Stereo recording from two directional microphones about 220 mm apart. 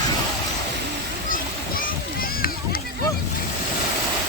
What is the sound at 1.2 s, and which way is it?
Splash, 40° left (ahead or behind).